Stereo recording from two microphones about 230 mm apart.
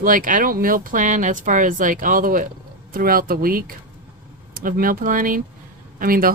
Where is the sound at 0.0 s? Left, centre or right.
Right.